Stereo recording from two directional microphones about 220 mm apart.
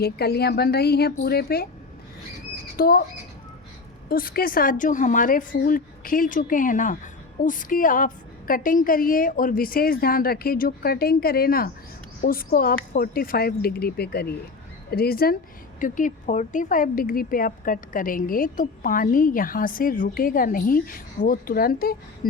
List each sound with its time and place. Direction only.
0.0 s speech: 45° left (ahead or behind)
2.7 s speech: 45° left (ahead or behind)
4.1 s a woman's voice: 40° left (ahead or behind)